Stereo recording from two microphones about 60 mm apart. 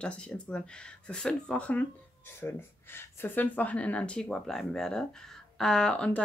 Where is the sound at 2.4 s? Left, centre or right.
Left.